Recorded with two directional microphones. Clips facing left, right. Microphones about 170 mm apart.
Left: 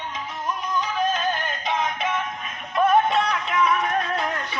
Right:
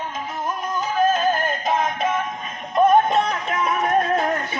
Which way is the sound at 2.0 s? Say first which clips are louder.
Right 3 dB; 40° right (ahead or behind).